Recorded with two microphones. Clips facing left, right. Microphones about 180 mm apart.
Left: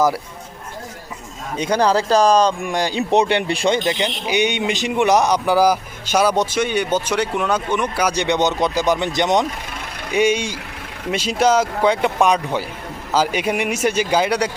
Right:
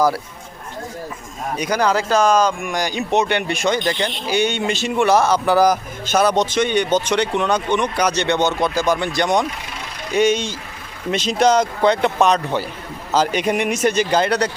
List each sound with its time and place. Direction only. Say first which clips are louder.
1.5 s speech: left 2 dB; 25° left (ahead or behind)
4.0 s speech: even; 15° left (ahead or behind)